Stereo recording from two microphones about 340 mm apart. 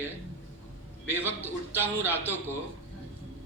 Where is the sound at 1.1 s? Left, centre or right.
Centre.